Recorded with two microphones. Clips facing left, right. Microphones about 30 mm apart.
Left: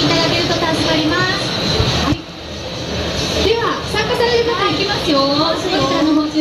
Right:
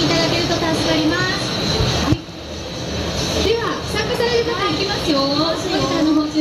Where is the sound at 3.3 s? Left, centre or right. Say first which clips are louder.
Left 3 dB; centre.